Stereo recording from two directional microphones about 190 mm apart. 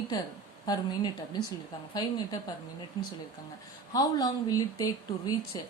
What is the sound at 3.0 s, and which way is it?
A woman's voice, 20° left (ahead or behind).